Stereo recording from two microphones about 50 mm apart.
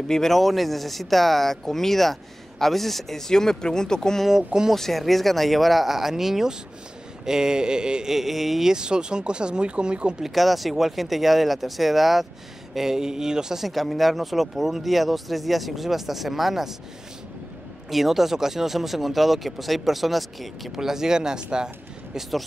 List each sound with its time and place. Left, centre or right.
0.1 s speech: centre
4.3 s speech: centre
4.7 s speech: centre
8.7 s speech: centre
10.2 s speech: centre
17.8 s speech: centre